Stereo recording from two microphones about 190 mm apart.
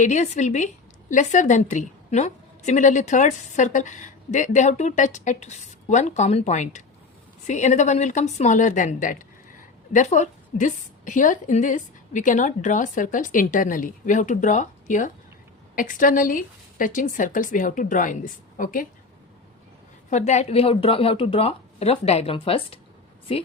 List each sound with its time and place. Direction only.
0.0 s a woman's voice: 40° left (ahead or behind)
20.1 s a woman's voice: 40° left (ahead or behind)